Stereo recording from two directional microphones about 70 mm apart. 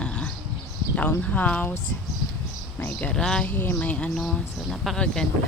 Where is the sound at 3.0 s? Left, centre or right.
Centre.